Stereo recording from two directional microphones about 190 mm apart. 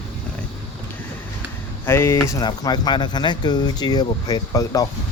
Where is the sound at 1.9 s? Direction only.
15° left (ahead or behind).